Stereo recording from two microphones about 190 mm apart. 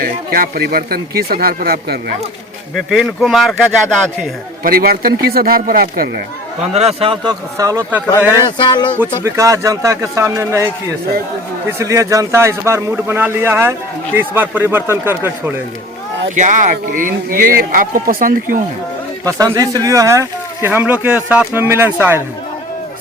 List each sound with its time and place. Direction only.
0.0 s a man's voice: 50° right (ahead or behind)
2.7 s speech: centre (ahead or behind)
4.6 s a man's voice: 50° right (ahead or behind)
6.6 s a man's voice: 35° right (ahead or behind); by 8.0 s 10° right (ahead or behind)
8.4 s speech: 25° left (ahead or behind)
9.0 s speech: 15° right (ahead or behind)
16.3 s a man's voice: 40° right (ahead or behind)
19.2 s speech: 20° right (ahead or behind)